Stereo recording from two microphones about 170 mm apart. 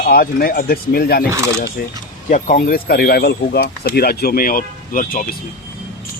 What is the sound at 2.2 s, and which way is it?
Speech, 50° left (ahead or behind).